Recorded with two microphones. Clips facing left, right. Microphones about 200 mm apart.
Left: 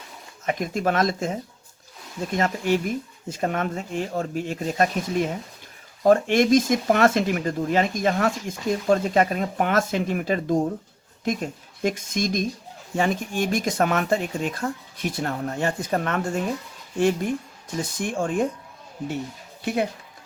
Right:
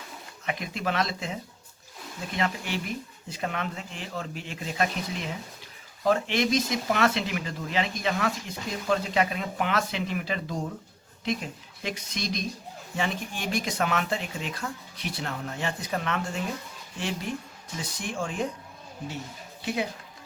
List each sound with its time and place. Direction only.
0.4 s speech: 45° left (ahead or behind)